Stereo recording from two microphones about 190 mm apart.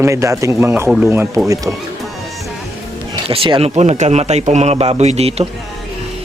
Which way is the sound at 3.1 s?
25° right (ahead or behind).